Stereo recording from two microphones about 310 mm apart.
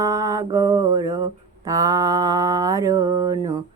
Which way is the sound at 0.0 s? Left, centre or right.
Centre.